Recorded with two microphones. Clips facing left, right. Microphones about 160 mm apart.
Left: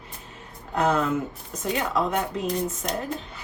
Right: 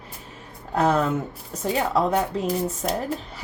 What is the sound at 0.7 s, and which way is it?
A woman's voice, 30° right (ahead or behind).